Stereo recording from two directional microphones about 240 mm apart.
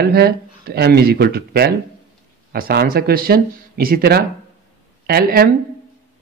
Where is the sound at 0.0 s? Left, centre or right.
Right.